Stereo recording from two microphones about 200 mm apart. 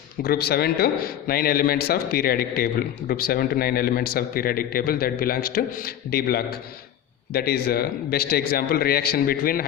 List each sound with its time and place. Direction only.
0.2 s a man's voice: 50° left (ahead or behind)